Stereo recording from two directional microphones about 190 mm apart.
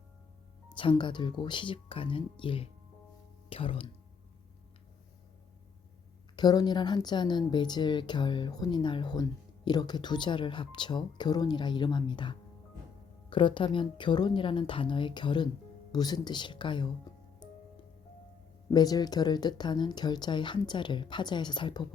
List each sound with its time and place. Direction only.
0.8 s speech: 25° left (ahead or behind)
6.3 s speech: 20° left (ahead or behind)
18.7 s speech: 20° left (ahead or behind)